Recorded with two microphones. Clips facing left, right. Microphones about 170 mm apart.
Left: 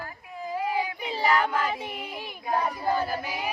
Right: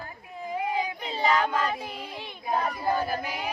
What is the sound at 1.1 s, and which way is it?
Child singing, 20° right (ahead or behind).